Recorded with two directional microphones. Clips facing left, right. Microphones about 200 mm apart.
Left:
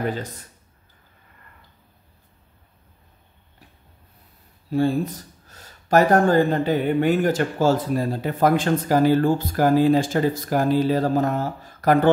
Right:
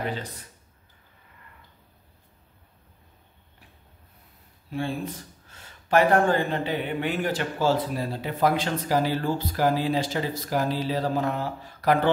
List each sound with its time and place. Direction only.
4.6 s speech: 40° left (ahead or behind)